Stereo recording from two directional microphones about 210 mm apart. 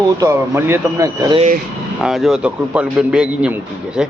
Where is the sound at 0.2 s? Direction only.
15° right (ahead or behind).